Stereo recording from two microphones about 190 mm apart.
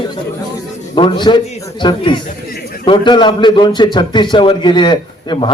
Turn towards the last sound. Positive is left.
turn(degrees=25)  # may be behind; listen again after turning